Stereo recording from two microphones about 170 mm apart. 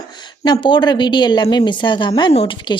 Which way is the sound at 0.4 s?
25° left (ahead or behind).